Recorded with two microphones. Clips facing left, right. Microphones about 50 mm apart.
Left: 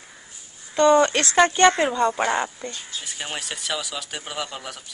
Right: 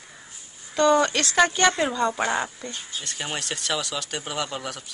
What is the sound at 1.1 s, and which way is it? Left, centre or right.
Speech, left.